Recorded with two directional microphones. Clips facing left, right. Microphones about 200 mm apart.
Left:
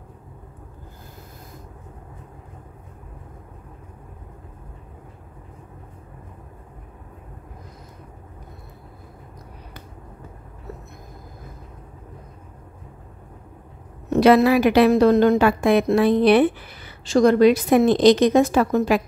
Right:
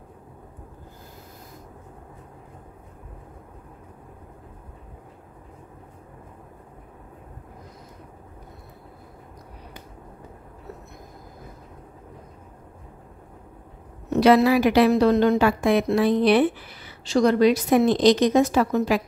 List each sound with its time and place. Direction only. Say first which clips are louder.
14.1 s a woman's voice: left 2 dB; 55° left (ahead or behind)